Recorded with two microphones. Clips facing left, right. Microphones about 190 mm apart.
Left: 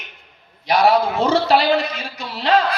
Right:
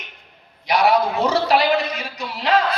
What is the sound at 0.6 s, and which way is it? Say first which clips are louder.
A woman's voice: left 2 dB; 30° left (ahead or behind).